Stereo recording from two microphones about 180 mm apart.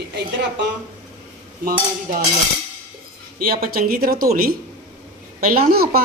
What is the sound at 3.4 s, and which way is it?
Speech, 55° right (ahead or behind).